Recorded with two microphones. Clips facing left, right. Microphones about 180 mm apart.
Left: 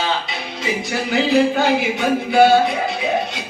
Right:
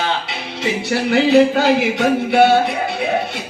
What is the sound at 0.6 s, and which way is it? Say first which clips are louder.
Speech: right 4 dB; 70° right (ahead or behind).